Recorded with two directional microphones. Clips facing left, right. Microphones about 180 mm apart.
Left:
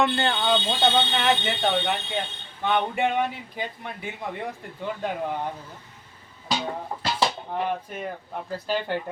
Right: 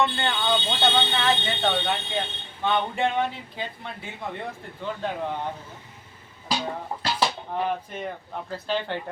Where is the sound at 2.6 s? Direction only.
15° left (ahead or behind).